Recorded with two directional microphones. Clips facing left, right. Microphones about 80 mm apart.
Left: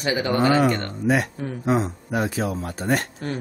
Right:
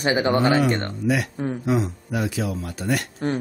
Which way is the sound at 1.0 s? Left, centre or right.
Left.